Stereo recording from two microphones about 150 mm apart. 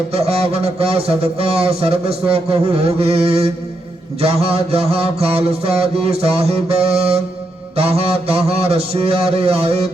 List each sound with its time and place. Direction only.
0.1 s a man's voice: 40° right (ahead or behind)